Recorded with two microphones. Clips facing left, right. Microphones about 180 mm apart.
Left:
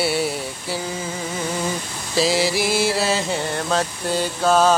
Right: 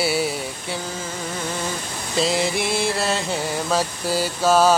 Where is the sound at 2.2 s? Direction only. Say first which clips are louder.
Left 2 dB; centre (ahead or behind).